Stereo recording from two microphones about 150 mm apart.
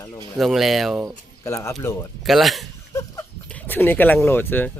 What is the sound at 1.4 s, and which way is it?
Speech, 20° left (ahead or behind).